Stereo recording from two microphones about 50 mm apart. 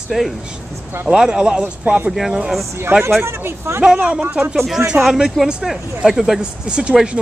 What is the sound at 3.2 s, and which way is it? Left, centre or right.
Speech, right.